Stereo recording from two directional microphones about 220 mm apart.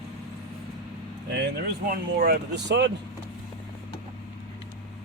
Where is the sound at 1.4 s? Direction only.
45° right (ahead or behind).